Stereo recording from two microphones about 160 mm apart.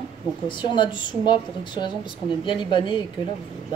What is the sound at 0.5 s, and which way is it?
A woman's voice, 30° left (ahead or behind).